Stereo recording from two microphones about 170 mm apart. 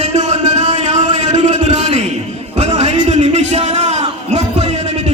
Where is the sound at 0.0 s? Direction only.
40° right (ahead or behind).